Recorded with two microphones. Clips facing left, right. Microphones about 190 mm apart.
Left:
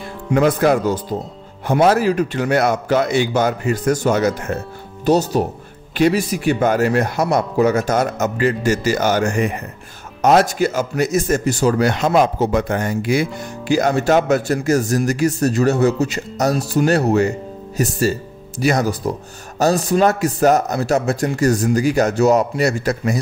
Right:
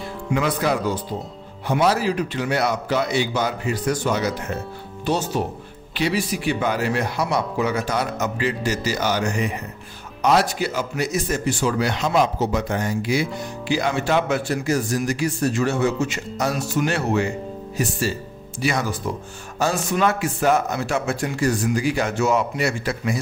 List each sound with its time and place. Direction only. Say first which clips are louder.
0.3 s speech: left 7 dB; 45° left (ahead or behind)